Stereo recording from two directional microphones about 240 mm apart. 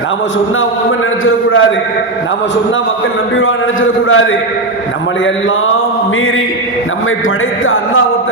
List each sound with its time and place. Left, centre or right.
0.9 s a man's voice: left
3.3 s a man's voice: left